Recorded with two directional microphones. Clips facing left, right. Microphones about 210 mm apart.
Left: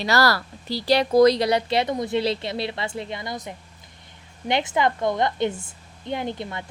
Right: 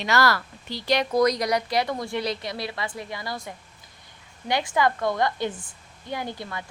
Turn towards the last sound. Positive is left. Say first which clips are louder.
# left 4 dB
turn(degrees=20)  # may be behind; listen again after turning